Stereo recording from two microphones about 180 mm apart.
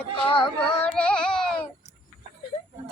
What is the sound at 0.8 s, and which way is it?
Music, 5° left (ahead or behind).